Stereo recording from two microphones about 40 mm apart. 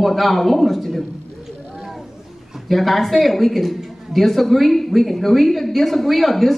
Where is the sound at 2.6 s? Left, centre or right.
Centre.